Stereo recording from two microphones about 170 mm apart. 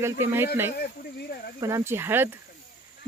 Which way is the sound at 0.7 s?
70° left (ahead or behind).